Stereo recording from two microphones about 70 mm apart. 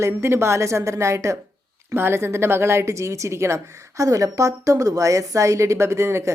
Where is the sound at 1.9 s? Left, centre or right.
Right.